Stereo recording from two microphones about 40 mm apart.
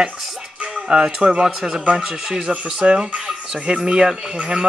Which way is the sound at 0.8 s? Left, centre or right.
Right.